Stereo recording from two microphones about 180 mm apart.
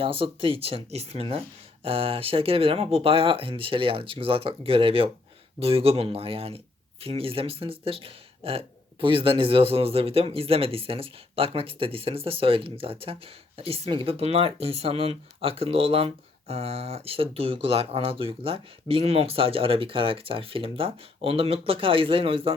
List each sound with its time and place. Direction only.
0.0 s speech: 30° right (ahead or behind)